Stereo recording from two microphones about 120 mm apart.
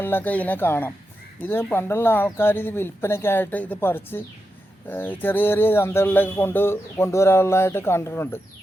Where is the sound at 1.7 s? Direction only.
20° left (ahead or behind).